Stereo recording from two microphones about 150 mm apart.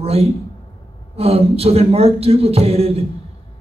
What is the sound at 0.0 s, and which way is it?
A man's voice, 40° right (ahead or behind).